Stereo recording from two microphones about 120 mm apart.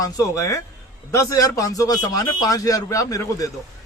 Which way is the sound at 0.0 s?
25° left (ahead or behind).